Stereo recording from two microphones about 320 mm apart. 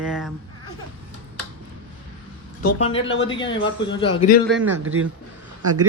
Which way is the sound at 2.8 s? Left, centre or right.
Centre.